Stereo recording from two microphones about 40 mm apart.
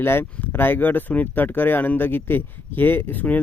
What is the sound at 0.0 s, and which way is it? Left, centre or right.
Speech, left.